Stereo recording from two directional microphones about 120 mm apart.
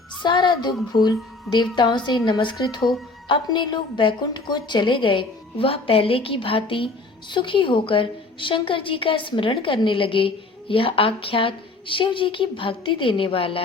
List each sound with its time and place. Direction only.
0.2 s a woman's voice: 40° left (ahead or behind)